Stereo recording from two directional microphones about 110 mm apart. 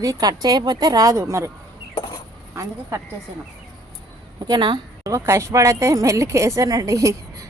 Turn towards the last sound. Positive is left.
turn(degrees=-30)  # may be behind; listen again after turning